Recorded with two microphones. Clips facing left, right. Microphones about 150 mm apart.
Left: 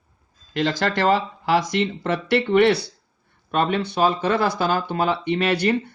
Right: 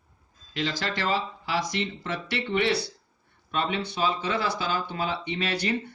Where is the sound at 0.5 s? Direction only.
55° left (ahead or behind).